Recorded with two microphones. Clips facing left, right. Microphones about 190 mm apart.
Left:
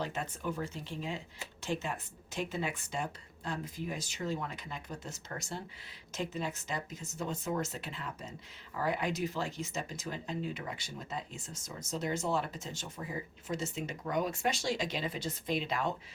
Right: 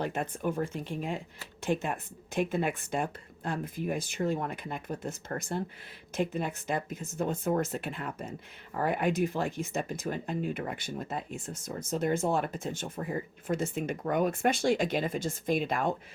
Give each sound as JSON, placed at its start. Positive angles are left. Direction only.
{"t": 0.0, "sound": "speech", "side_deg": -55}